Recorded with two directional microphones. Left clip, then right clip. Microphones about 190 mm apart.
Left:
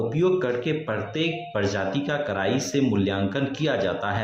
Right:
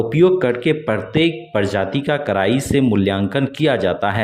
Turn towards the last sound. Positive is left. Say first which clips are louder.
# right 7 dB
turn(degrees=-45)  # may be behind; listen again after turning